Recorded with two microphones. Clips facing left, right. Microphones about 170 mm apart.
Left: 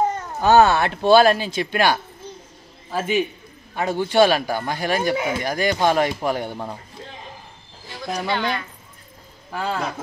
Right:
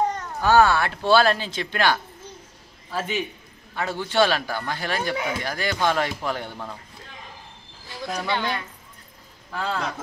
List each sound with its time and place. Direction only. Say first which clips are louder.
0.0 s cat: left 2 dB; 5° left (ahead or behind)
0.4 s speech: left 3 dB; 20° left (ahead or behind)